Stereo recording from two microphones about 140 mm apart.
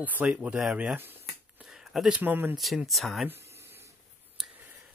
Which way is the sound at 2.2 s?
15° right (ahead or behind).